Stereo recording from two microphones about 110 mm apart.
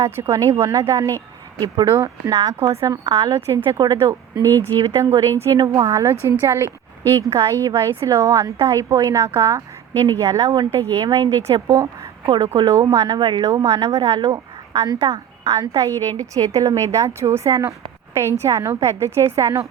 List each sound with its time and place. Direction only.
0.0 s a woman's voice: 25° right (ahead or behind)
1.6 s a woman's voice: 40° right (ahead or behind)
1.9 s a woman's voice: 25° right (ahead or behind)
4.4 s speech: 20° left (ahead or behind)
4.7 s a woman's voice: 50° right (ahead or behind)
4.9 s a woman's voice: 30° right (ahead or behind); by 13.5 s 45° right (ahead or behind)
13.7 s a woman's voice: 30° right (ahead or behind)